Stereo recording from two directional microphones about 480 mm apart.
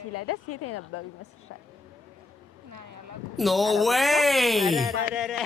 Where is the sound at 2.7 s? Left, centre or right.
Right.